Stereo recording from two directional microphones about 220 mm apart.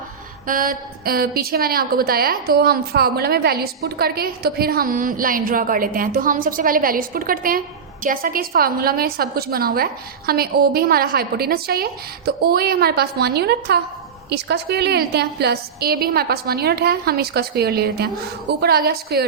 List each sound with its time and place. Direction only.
0.4 s a woman's voice: 40° right (ahead or behind)